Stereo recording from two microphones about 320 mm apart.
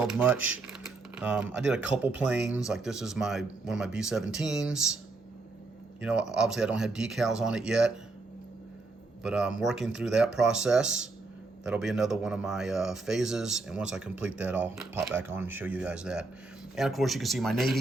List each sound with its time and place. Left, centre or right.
0.0 s speech: centre
6.0 s speech: centre
9.2 s speech: centre